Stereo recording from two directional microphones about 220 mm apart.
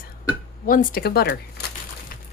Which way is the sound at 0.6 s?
40° left (ahead or behind).